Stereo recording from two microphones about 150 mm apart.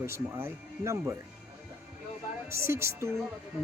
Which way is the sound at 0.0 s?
15° right (ahead or behind).